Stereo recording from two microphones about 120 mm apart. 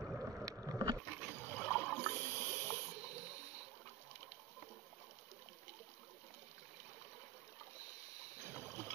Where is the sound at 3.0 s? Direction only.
30° left (ahead or behind).